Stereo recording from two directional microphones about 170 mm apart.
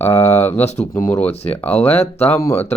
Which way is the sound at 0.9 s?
15° left (ahead or behind).